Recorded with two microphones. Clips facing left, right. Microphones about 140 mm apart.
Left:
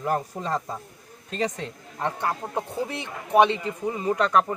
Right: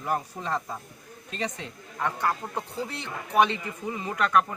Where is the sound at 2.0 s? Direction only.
25° left (ahead or behind).